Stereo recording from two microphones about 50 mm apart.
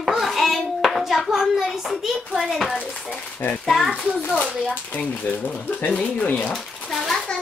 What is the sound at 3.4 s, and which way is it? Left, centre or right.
Speech, left.